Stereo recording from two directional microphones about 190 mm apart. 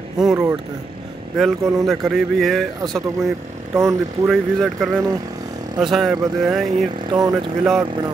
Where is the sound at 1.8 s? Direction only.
Centre (ahead or behind).